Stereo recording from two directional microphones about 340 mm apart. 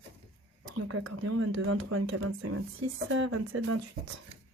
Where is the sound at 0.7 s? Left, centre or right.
Right.